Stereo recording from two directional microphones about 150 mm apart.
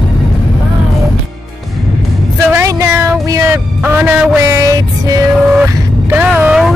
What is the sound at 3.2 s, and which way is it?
Music, 25° right (ahead or behind).